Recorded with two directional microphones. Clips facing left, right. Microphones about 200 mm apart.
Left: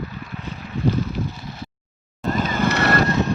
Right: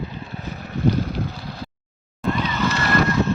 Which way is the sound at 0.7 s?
60° right (ahead or behind).